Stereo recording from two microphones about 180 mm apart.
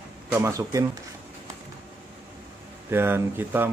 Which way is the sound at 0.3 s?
15° right (ahead or behind).